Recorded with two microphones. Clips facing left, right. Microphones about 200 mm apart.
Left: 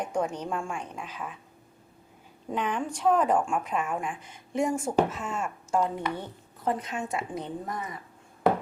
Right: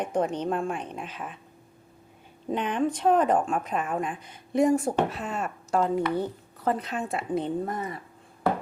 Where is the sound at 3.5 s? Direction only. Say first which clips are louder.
Right 1 dB; 35° right (ahead or behind).